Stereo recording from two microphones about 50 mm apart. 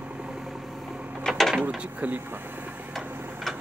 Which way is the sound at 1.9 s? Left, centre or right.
Right.